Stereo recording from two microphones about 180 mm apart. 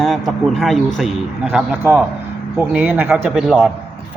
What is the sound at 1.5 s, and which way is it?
Speech, 10° right (ahead or behind).